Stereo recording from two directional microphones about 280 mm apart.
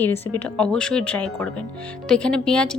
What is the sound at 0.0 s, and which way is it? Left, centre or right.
Speech, centre.